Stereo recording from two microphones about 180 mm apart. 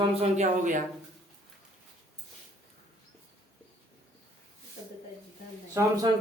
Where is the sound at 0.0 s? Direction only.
35° right (ahead or behind).